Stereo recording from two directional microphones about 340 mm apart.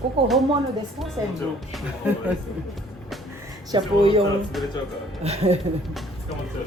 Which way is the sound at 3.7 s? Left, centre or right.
Centre.